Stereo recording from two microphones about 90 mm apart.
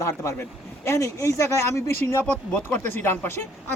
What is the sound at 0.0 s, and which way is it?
Speech, 35° left (ahead or behind).